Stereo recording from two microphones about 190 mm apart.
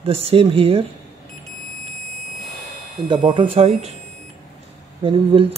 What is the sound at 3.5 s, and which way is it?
Speech, 30° right (ahead or behind).